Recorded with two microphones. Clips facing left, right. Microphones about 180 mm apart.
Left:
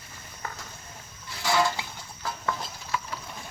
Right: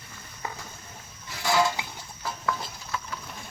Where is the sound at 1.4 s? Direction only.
15° right (ahead or behind).